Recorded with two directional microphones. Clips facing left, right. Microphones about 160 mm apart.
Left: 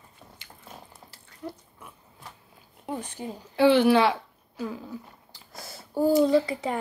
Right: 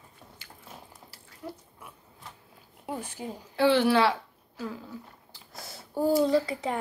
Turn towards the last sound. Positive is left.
turn(degrees=0)  # may be behind; listen again after turning